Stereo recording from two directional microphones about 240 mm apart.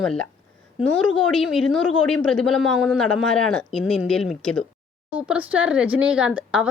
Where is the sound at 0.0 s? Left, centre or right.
Centre.